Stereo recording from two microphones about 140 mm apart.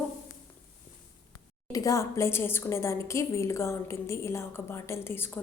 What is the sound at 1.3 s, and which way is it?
A woman's voice, 25° left (ahead or behind).